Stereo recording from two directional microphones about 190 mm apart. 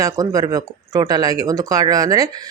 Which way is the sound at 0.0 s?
20° right (ahead or behind).